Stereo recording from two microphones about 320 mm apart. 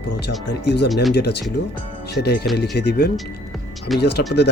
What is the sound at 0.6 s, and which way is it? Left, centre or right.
Speech, left.